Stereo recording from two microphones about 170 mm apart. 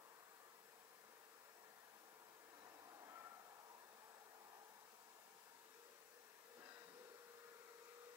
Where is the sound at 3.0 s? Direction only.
20° right (ahead or behind).